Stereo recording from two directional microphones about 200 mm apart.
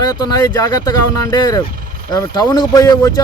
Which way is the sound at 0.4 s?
20° left (ahead or behind).